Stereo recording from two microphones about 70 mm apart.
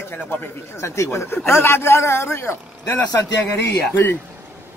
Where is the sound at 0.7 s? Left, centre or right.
Left.